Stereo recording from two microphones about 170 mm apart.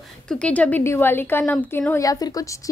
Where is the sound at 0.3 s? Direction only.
5° left (ahead or behind).